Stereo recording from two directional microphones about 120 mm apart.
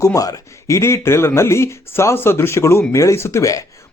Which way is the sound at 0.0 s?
30° left (ahead or behind).